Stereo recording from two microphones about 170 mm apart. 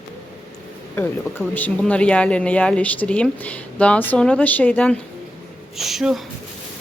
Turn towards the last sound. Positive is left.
turn(degrees=-5)  # may be behind; listen again after turning